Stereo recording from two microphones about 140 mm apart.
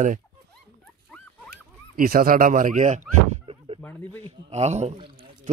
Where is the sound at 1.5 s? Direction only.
90° right; by 3.0 s 60° right (ahead or behind).